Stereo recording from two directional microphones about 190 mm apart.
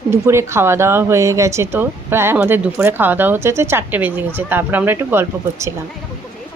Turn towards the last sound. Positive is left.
turn(degrees=-10)  # may be behind; listen again after turning